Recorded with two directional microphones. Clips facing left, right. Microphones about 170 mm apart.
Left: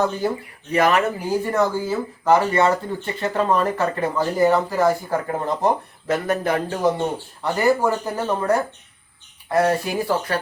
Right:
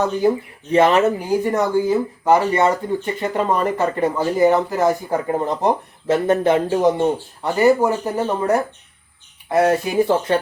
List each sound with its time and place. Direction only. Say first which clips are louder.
0.0 s speech: right 4 dB; 15° right (ahead or behind)
0.7 s speech: right 4 dB; 25° right (ahead or behind)